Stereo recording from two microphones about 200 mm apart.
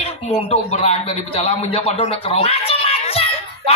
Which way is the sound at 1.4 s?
30° left (ahead or behind).